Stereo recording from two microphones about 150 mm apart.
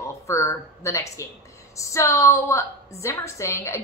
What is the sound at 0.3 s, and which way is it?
A woman's voice, 20° left (ahead or behind).